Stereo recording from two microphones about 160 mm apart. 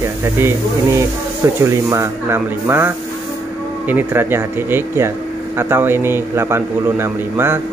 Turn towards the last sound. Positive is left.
turn(degrees=-15)  # may be behind; listen again after turning